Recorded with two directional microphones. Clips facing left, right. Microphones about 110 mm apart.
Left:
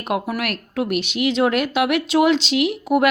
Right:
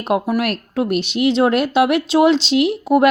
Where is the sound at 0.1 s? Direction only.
30° right (ahead or behind).